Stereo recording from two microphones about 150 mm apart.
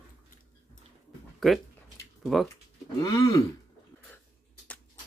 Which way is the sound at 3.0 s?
25° left (ahead or behind).